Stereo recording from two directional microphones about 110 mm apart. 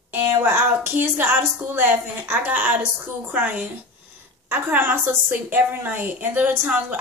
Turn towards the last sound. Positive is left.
turn(degrees=-15)  # may be behind; listen again after turning